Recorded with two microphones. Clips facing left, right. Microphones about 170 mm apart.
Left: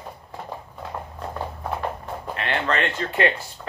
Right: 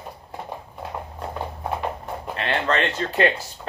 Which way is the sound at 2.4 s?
35° right (ahead or behind).